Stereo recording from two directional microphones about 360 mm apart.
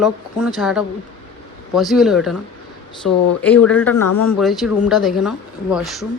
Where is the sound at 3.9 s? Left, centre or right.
Left.